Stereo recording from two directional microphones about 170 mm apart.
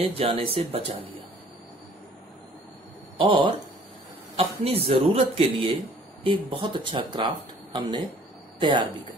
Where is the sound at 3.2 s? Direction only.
30° right (ahead or behind).